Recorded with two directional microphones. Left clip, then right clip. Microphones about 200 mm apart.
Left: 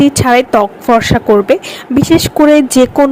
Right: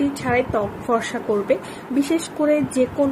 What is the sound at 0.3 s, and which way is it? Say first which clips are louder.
A woman's voice: left 10 dB; 55° left (ahead or behind).